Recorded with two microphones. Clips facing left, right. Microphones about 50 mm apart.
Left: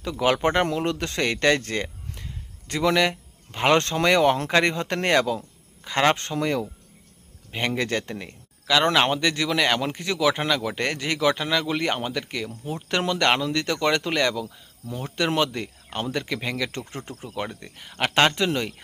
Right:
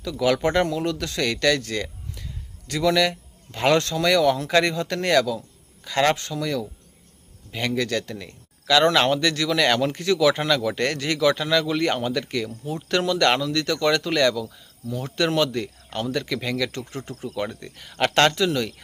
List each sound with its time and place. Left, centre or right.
0.0 s speech: left
5.4 s a sound: left
6.1 s speech: left; by 12.5 s centre
12.5 s speech: left
15.0 s speech: centre
18.4 s speech: left